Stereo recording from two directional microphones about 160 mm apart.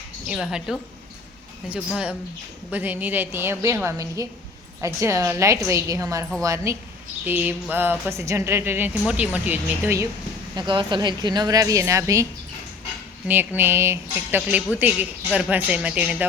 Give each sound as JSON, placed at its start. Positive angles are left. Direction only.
{"t": 0.3, "sound": "speech", "side_deg": -5}
{"t": 2.6, "sound": "a woman's voice", "side_deg": -10}
{"t": 10.5, "sound": "a woman's voice", "side_deg": -30}